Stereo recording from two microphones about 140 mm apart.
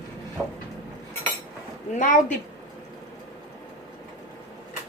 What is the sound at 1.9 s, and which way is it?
Speech, 65° left (ahead or behind).